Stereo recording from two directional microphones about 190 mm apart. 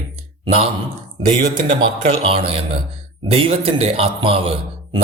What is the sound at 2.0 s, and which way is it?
A man's voice, 30° right (ahead or behind).